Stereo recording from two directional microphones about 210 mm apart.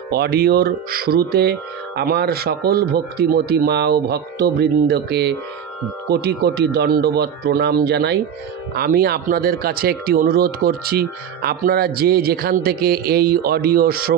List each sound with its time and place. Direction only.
0.1 s speech: 50° right (ahead or behind)